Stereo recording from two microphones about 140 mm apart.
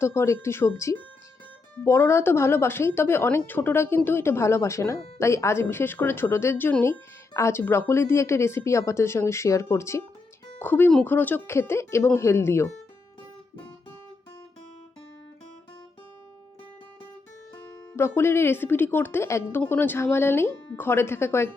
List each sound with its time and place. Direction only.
0.0 s speech: 20° left (ahead or behind)
17.9 s speech: 15° left (ahead or behind)